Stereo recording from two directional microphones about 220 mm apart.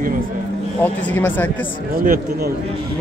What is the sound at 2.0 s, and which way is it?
Speech, 40° right (ahead or behind).